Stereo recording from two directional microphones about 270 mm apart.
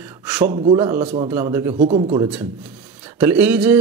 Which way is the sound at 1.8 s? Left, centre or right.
Right.